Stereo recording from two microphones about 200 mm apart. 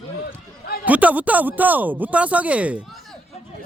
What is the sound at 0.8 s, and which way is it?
Speech, 5° right (ahead or behind).